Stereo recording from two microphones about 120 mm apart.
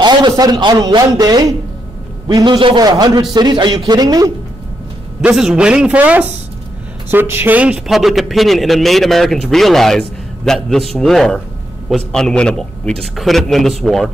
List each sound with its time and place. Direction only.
0.0 s a man's voice: 35° right (ahead or behind)
5.3 s a man's voice: 5° right (ahead or behind)